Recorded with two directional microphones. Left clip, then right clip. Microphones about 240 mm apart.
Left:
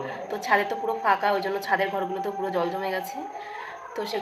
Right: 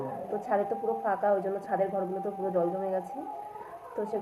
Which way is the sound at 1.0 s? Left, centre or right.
Left.